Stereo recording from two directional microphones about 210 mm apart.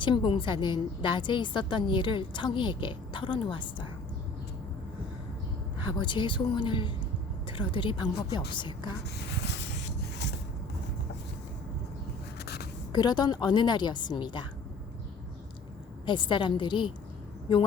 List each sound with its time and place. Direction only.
0.0 s a woman's voice: 20° left (ahead or behind)
5.8 s a woman's voice: 20° left (ahead or behind)
9.4 s a sound: 55° left (ahead or behind)
12.9 s a woman's voice: 20° left (ahead or behind)
16.0 s a woman's voice: 20° left (ahead or behind)